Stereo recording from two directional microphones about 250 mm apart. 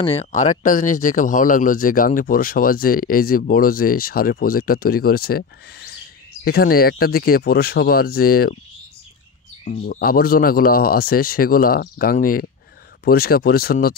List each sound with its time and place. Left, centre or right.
0.0 s speech: left
9.7 s speech: left